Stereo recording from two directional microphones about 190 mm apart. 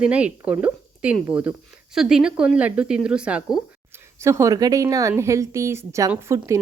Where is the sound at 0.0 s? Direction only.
5° right (ahead or behind).